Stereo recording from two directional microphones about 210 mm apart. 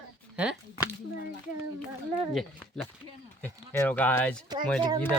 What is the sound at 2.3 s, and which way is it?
Speech, centre (ahead or behind).